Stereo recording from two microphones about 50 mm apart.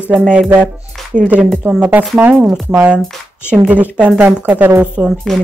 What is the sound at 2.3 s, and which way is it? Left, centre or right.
Speech, centre.